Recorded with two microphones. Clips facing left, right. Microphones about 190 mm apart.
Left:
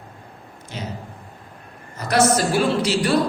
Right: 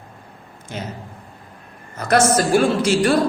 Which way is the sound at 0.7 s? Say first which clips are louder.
Right 2 dB; 50° right (ahead or behind).